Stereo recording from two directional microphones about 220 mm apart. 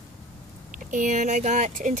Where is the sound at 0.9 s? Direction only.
35° right (ahead or behind).